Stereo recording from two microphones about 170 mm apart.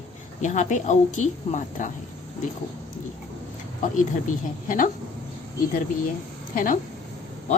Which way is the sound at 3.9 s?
50° left (ahead or behind).